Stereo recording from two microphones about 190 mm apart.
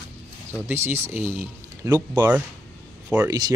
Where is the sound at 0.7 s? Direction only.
10° right (ahead or behind).